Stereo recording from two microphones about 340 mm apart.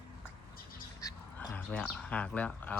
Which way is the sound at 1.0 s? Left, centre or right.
Centre.